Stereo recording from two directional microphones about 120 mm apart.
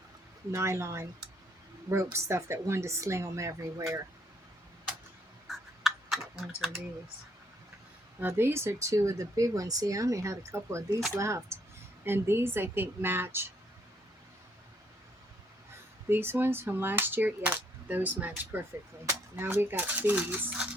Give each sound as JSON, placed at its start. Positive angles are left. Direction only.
{"t": 0.5, "sound": "speech", "side_deg": -25}
{"t": 5.5, "sound": "a sound", "side_deg": 0}
{"t": 8.2, "sound": "speech", "side_deg": -20}
{"t": 16.0, "sound": "cap gun", "side_deg": -20}